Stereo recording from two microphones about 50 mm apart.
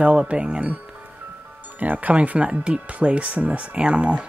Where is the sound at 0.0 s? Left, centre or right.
Right.